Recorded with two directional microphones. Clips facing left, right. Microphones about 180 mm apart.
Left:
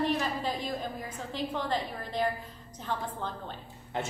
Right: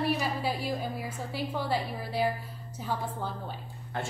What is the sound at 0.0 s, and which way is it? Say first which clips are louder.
A woman's voice: even; 10° right (ahead or behind).